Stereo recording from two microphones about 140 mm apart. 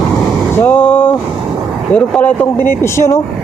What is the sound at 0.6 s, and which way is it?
Vehicle, 15° left (ahead or behind).